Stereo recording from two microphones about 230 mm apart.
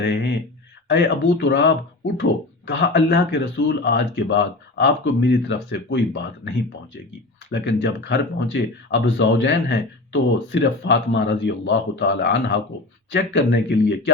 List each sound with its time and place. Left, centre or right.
0.0 s speech: left
7.5 s speech: left